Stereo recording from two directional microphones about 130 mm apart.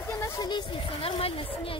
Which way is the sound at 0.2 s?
35° left (ahead or behind).